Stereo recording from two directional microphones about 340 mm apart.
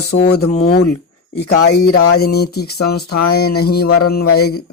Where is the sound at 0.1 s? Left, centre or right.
Left.